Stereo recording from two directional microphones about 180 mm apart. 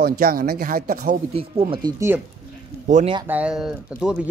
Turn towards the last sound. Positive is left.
turn(degrees=-5)  # may be behind; listen again after turning